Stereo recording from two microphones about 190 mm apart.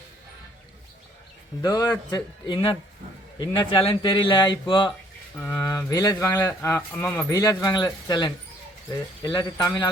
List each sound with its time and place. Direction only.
1.6 s a man's voice: 20° left (ahead or behind)
5.4 s a man's voice: 15° left (ahead or behind)